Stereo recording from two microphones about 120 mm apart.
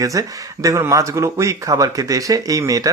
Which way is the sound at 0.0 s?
30° right (ahead or behind).